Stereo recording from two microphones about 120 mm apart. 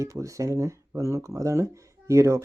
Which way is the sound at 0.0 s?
25° right (ahead or behind).